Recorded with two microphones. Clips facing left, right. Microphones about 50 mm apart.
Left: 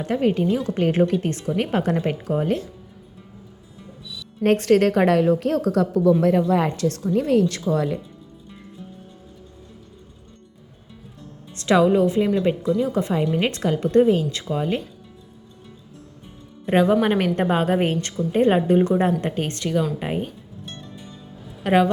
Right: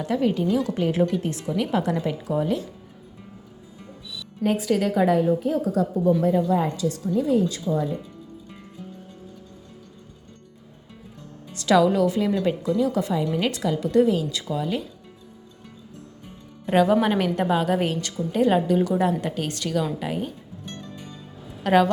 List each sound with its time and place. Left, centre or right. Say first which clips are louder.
0.0 s a woman's voice: left 2 dB; left
4.4 s a woman's voice: left 6 dB; left
6.4 s a woman's voice: left 2 dB; left
11.5 s a woman's voice: left 2 dB; left
16.6 s a woman's voice: left 1 dB; left
17.3 s a woman's voice: left 2 dB; left
21.6 s speech: even; centre